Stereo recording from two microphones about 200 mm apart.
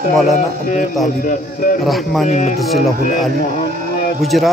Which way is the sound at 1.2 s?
45° left (ahead or behind).